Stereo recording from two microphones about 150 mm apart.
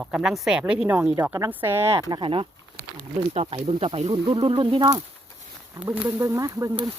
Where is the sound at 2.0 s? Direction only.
30° right (ahead or behind).